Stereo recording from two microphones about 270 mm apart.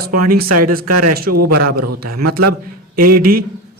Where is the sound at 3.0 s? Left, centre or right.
Right.